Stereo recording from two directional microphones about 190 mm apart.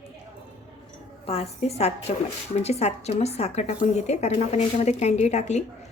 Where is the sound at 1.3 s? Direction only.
30° left (ahead or behind).